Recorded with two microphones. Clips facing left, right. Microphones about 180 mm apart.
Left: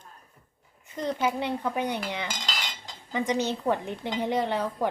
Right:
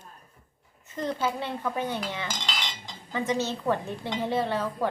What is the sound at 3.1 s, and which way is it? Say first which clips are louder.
Speech: left 1 dB; 15° left (ahead or behind).